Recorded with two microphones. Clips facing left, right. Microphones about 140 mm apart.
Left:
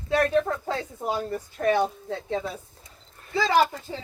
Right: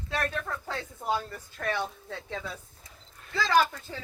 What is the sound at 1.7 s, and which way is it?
Speech, 50° left (ahead or behind).